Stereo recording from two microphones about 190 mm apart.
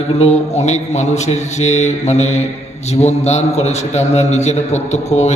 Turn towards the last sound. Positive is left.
turn(degrees=35)  # may be behind; listen again after turning